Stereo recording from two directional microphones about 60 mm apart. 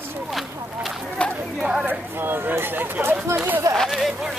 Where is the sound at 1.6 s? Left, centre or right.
Centre.